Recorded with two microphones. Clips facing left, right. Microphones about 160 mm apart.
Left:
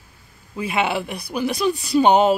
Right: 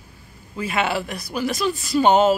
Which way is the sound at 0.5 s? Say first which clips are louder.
Left 1 dB; 15° left (ahead or behind).